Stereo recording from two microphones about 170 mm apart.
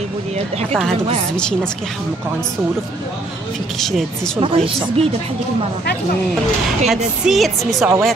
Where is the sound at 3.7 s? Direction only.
Centre (ahead or behind).